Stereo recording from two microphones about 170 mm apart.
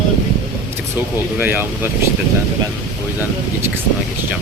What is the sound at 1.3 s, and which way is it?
Speech, 10° right (ahead or behind).